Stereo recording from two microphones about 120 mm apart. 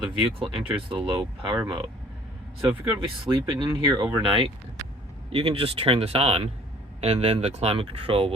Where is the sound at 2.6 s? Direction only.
20° right (ahead or behind).